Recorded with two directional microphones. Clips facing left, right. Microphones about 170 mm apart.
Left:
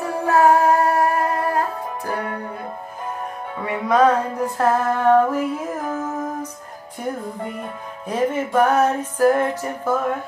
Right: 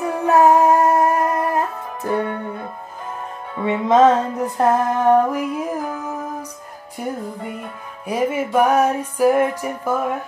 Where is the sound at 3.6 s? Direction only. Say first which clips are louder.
Right 3 dB; 25° right (ahead or behind).